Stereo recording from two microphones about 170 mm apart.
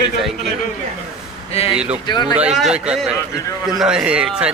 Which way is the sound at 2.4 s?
5° right (ahead or behind).